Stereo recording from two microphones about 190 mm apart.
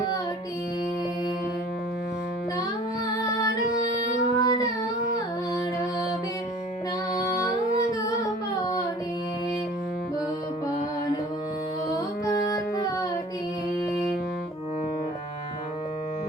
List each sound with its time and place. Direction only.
3.2 s music: 20° left (ahead or behind)
4.3 s child singing: 20° left (ahead or behind)
7.1 s music: 15° left (ahead or behind)
11.9 s music: 15° left (ahead or behind)